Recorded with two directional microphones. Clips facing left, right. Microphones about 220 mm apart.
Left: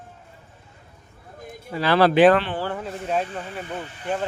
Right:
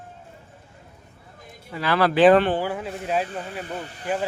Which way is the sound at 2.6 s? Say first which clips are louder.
Right 1 dB; 5° right (ahead or behind).